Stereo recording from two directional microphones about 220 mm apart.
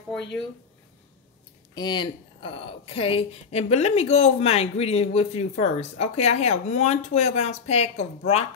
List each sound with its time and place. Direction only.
1.8 s a woman's voice: 20° left (ahead or behind)